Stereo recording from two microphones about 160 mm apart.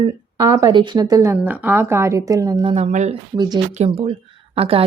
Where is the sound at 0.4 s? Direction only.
20° right (ahead or behind).